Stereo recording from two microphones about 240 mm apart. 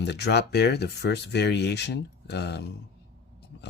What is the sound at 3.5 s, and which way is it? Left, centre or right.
Biting, left.